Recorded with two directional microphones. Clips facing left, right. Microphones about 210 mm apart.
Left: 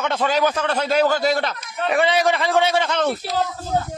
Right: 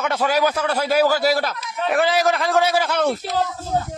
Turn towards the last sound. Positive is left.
turn(degrees=-5)  # may be behind; listen again after turning